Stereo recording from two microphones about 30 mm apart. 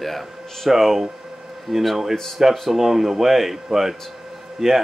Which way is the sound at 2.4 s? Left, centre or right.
Centre.